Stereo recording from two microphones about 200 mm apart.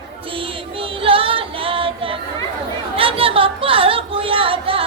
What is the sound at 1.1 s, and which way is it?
Singing, 25° right (ahead or behind).